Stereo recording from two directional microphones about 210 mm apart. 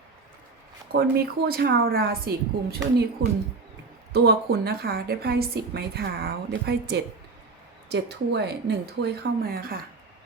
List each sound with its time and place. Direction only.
0.9 s a woman's voice: 50° right (ahead or behind)
4.1 s a woman's voice: 50° right (ahead or behind)